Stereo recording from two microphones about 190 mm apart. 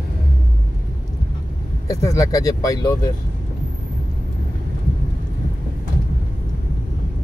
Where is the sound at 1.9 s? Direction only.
15° left (ahead or behind).